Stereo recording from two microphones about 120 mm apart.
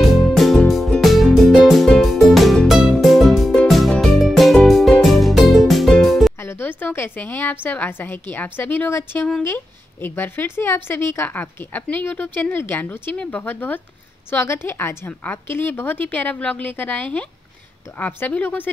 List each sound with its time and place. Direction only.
0.0 s music: centre (ahead or behind)
6.4 s a woman's voice: 15° left (ahead or behind)